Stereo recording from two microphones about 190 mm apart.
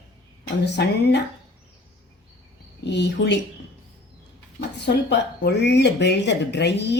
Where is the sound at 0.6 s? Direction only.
65° left (ahead or behind).